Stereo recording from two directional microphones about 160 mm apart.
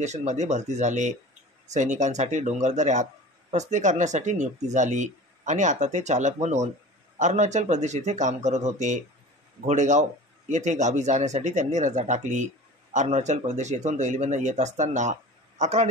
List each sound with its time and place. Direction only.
0.0 s speech: 45° right (ahead or behind)